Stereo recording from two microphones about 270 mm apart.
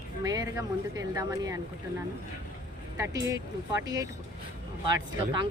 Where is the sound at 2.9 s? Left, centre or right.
Centre.